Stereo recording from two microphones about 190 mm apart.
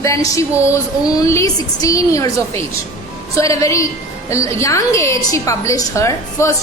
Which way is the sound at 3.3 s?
15° left (ahead or behind).